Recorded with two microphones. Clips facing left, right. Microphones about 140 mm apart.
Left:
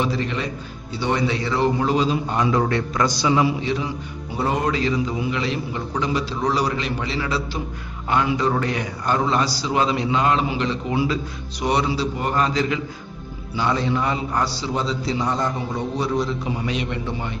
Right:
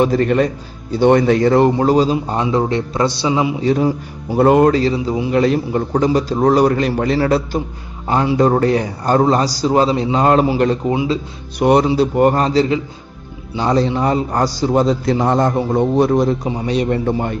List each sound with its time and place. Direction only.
0.0 s speech: 50° right (ahead or behind); by 3.5 s 20° right (ahead or behind)
3.6 s a man's voice: 45° right (ahead or behind)
4.7 s speech: 35° right (ahead or behind)
5.3 s a man's voice: 45° right (ahead or behind)
8.0 s speech: 30° right (ahead or behind)
10.9 s speech: 20° right (ahead or behind)
11.6 s a man's voice: 50° right (ahead or behind)
16.5 s speech: 35° right (ahead or behind)